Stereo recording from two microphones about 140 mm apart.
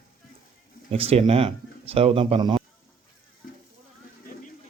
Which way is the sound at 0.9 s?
45° right (ahead or behind).